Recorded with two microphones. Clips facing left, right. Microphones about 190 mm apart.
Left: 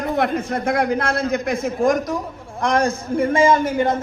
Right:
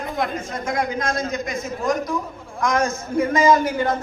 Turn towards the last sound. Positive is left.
turn(degrees=25)  # may be behind; listen again after turning